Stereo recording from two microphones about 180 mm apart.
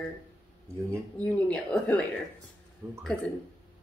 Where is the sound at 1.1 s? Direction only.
5° left (ahead or behind).